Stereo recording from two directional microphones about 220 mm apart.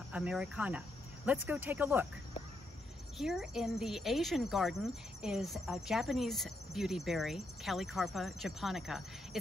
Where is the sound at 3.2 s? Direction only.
Centre (ahead or behind).